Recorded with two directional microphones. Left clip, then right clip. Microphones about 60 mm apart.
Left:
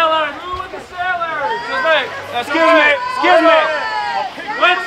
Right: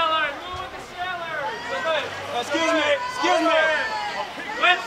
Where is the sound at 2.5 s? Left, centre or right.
Left.